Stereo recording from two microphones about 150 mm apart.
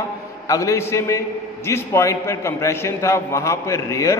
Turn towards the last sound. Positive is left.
turn(degrees=20)  # may be behind; listen again after turning